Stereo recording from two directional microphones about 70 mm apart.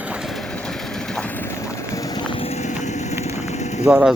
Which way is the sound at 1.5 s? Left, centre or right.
Left.